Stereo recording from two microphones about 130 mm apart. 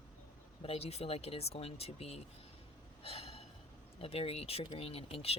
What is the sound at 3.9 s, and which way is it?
Speech, 45° left (ahead or behind).